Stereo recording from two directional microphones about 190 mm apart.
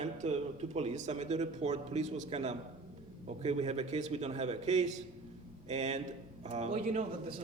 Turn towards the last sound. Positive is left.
turn(degrees=-35)  # may be behind; listen again after turning